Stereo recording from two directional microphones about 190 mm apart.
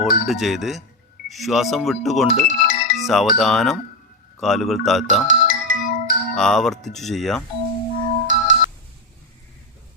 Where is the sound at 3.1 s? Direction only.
Centre (ahead or behind).